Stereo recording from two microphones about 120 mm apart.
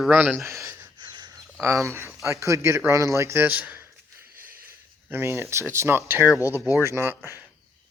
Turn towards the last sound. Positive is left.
turn(degrees=-20)  # may be behind; listen again after turning